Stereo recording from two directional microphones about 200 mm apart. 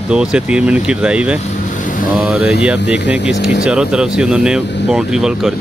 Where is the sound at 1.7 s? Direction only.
40° left (ahead or behind).